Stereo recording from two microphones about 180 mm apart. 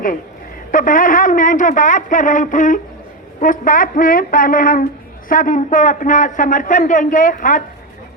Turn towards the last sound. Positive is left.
turn(degrees=45)  # may be behind; listen again after turning